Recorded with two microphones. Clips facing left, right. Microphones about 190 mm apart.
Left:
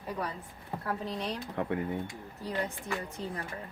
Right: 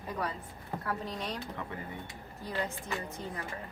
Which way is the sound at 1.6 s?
55° left (ahead or behind).